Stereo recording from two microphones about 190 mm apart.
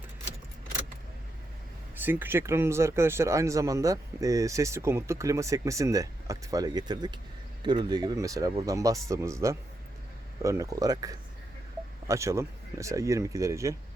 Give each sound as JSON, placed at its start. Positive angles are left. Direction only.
{"t": 2.0, "sound": "speech", "side_deg": -10}